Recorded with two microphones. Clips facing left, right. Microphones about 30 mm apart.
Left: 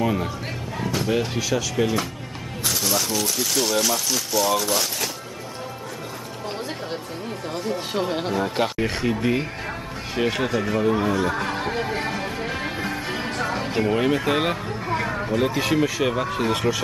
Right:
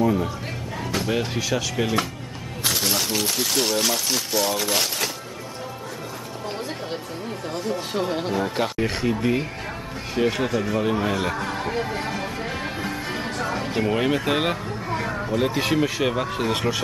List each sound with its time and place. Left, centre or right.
0.9 s speech: centre
2.6 s speech: right
7.5 s speech: centre
11.1 s speech: centre
11.4 s music: centre
14.9 s a sound: centre
15.4 s speech: centre